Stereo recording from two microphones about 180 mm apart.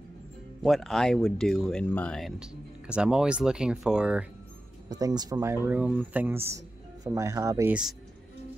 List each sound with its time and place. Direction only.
0.6 s speech: centre (ahead or behind)
4.8 s speech: 20° right (ahead or behind)